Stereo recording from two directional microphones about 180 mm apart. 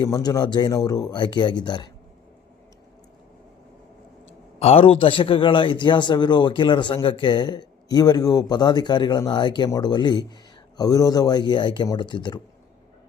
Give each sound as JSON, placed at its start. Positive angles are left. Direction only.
{"t": 0.0, "sound": "a man's voice", "side_deg": 20}
{"t": 4.6, "sound": "a man's voice", "side_deg": 35}